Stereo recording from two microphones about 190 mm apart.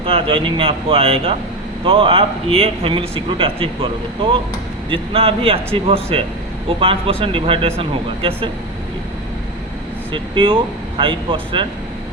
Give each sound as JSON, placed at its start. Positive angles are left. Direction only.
{"t": 0.0, "sound": "a man's voice", "side_deg": -30}
{"t": 4.9, "sound": "a man's voice", "side_deg": -30}
{"t": 10.1, "sound": "a man's voice", "side_deg": -25}